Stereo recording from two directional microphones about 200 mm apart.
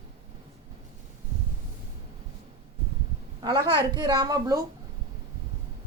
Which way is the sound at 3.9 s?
20° right (ahead or behind).